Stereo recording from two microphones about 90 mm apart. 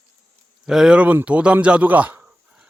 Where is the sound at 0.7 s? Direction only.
5° right (ahead or behind).